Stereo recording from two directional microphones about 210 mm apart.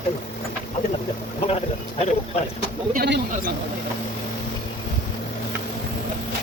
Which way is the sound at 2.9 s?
50° right (ahead or behind).